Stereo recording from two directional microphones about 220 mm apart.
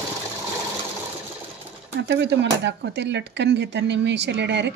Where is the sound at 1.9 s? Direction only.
50° right (ahead or behind).